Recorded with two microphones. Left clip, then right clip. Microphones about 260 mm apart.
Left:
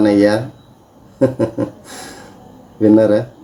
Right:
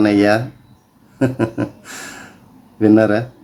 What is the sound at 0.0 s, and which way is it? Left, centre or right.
Speech, right.